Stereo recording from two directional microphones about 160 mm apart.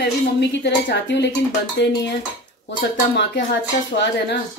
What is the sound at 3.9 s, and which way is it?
Speech, 75° left (ahead or behind).